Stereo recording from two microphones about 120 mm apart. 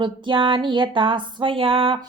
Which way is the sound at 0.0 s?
45° right (ahead or behind).